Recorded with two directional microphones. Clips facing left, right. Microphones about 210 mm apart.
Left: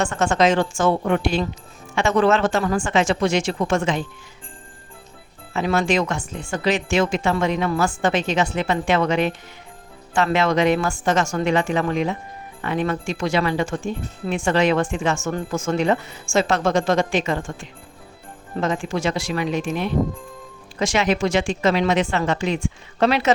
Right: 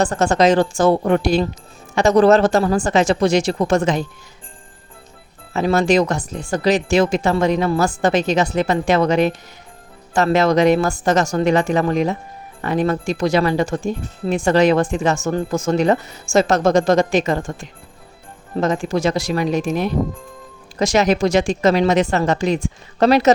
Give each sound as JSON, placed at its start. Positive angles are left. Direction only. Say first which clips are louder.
{"t": 0.0, "sound": "speech", "louder": "right 3 dB", "side_deg": -35}
{"t": 5.5, "sound": "speech", "louder": "right 5 dB", "side_deg": -40}